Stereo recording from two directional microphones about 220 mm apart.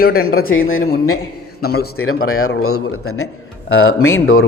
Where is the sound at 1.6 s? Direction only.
45° left (ahead or behind).